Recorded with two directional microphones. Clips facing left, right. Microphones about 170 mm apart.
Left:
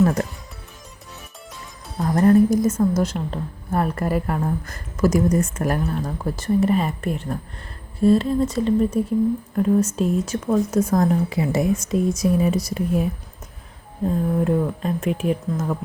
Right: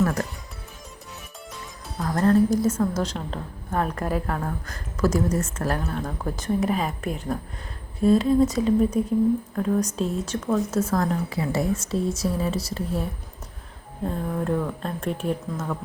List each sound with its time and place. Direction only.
0.0 s speech: 20° left (ahead or behind)
2.0 s speech: 15° left (ahead or behind)